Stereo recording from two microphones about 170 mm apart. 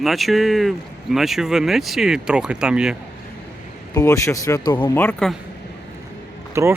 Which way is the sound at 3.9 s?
20° left (ahead or behind).